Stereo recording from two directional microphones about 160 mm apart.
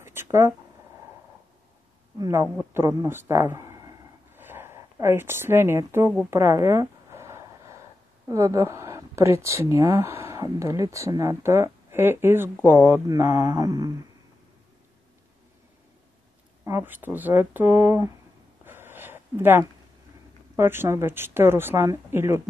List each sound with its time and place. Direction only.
0.0 s speech: 15° right (ahead or behind)
2.1 s a man's voice: 20° right (ahead or behind)
6.3 s a sound: 15° right (ahead or behind)
8.3 s speech: 20° right (ahead or behind)
16.6 s speech: 15° right (ahead or behind)
18.7 s a sound: 15° right (ahead or behind)
20.5 s speech: 15° right (ahead or behind)